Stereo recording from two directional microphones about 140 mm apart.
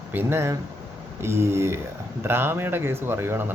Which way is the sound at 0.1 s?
15° right (ahead or behind).